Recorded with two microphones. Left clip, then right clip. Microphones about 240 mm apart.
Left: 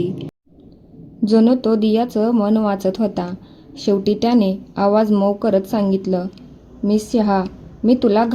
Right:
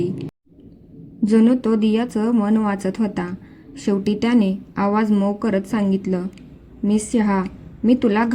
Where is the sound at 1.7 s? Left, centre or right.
Right.